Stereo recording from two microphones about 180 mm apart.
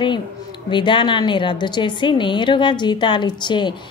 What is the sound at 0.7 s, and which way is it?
A woman's voice, 25° left (ahead or behind).